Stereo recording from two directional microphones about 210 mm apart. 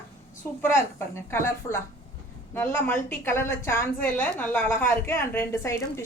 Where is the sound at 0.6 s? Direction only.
10° left (ahead or behind).